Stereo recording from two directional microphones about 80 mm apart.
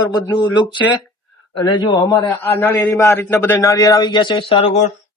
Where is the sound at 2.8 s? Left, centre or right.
Left.